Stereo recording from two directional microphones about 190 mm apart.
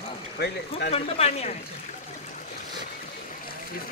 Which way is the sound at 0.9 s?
35° left (ahead or behind).